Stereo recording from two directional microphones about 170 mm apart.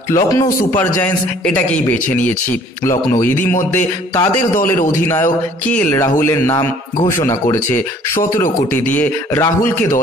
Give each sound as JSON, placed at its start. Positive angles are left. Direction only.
{"t": 0.1, "sound": "a man's voice", "side_deg": 20}
{"t": 8.9, "sound": "a man's voice", "side_deg": 10}